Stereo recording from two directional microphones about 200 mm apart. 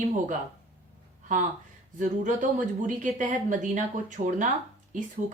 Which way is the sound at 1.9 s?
40° right (ahead or behind).